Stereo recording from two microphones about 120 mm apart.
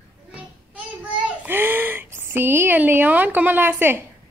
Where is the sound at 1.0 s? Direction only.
10° right (ahead or behind).